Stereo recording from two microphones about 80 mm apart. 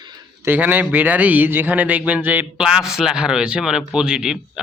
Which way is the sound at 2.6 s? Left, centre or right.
Centre.